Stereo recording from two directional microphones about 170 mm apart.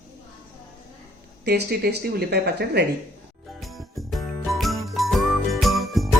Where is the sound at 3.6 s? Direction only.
Centre (ahead or behind).